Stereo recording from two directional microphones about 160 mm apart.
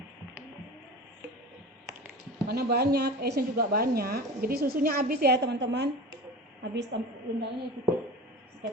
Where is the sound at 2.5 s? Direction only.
80° right.